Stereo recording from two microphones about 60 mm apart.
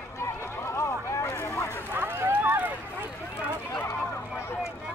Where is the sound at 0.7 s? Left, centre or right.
Left.